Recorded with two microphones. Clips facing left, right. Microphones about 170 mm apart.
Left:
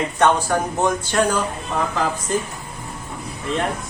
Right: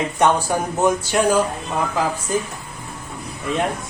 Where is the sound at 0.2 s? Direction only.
10° right (ahead or behind).